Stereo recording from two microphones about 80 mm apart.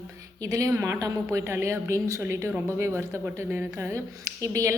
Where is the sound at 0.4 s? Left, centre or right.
Right.